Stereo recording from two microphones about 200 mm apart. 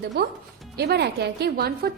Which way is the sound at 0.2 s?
55° right (ahead or behind).